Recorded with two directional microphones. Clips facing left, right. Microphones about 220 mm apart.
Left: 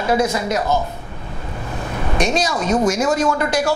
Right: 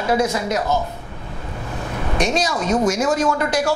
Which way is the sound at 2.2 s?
10° left (ahead or behind).